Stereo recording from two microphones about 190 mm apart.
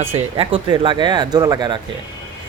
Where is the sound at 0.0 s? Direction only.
30° right (ahead or behind).